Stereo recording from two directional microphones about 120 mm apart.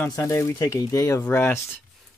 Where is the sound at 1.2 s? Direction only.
15° left (ahead or behind).